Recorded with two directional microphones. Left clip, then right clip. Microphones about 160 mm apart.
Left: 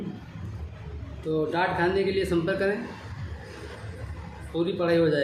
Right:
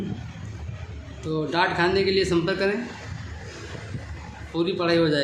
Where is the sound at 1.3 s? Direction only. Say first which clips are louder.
Right 2 dB; 40° right (ahead or behind).